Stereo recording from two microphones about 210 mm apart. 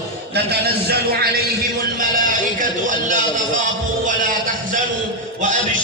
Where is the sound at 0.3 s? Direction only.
50° right (ahead or behind).